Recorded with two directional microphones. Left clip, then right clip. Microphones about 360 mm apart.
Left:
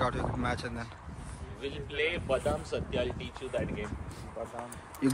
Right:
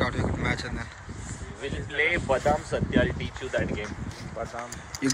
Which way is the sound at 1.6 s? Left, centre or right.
Right.